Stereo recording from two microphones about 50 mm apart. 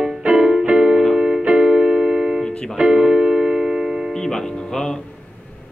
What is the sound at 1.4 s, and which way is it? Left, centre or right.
Keyboard, centre.